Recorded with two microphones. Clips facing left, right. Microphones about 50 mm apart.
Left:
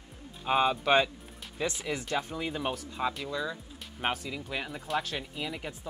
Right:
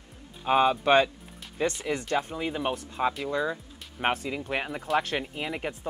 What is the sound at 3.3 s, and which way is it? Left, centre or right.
Speech, right.